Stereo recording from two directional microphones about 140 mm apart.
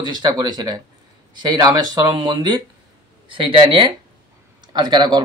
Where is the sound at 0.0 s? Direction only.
30° right (ahead or behind).